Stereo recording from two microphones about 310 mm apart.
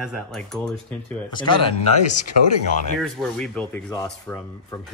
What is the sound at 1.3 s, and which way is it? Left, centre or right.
Speech, centre.